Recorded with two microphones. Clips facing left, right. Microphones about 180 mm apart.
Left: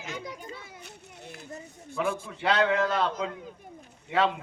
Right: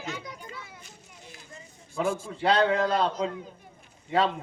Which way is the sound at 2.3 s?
35° right (ahead or behind).